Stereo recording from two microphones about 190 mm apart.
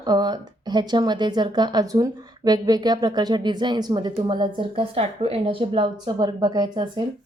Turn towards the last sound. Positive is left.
turn(degrees=-25)  # may be behind; listen again after turning